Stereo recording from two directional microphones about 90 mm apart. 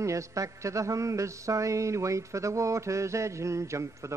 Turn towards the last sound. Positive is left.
turn(degrees=-35)  # may be behind; listen again after turning